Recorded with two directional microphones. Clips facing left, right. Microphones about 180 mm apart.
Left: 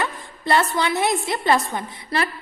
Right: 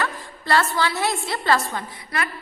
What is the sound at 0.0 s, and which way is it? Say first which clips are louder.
A woman's voice: left 1 dB; 20° left (ahead or behind).